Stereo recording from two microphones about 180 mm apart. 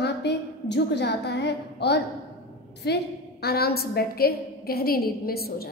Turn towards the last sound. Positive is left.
turn(degrees=60)  # may be behind; listen again after turning